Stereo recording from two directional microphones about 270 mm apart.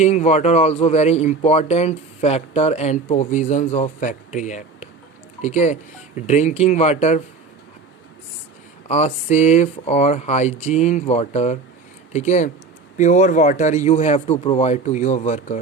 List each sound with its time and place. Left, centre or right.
0.0 s speech: left
8.9 s speech: left